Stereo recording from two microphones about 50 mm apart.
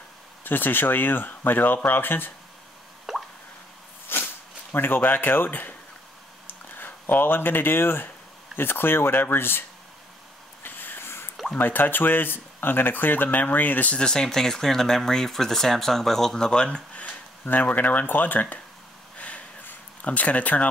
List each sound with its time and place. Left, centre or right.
0.4 s speech: left
3.1 s plop: centre
4.1 s a sound: left
4.7 s speech: left
10.6 s a sound: left
11.5 s speech: left
13.9 s speech: centre; by 18.6 s left
19.1 s a sound: left
20.0 s speech: left